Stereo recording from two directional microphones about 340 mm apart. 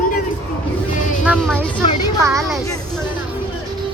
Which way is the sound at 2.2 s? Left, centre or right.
Centre.